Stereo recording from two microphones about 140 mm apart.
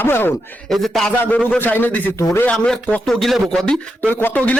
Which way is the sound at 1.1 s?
10° left (ahead or behind).